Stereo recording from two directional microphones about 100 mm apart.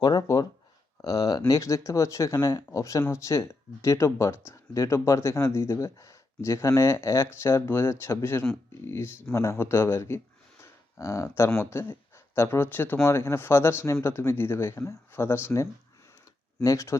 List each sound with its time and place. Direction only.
0.0 s speech: 35° left (ahead or behind)
16.6 s speech: 30° left (ahead or behind)